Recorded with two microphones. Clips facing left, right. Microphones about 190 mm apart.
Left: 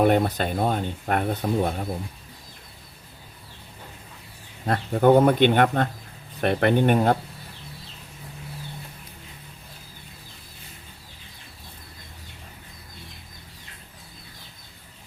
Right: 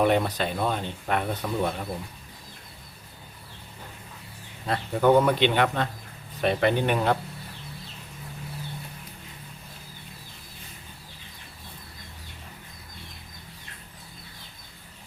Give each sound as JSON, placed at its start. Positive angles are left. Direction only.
{"t": 0.0, "sound": "speech", "side_deg": 45}
{"t": 4.6, "sound": "speech", "side_deg": 50}